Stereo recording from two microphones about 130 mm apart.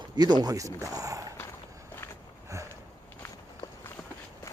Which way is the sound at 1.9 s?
20° left (ahead or behind).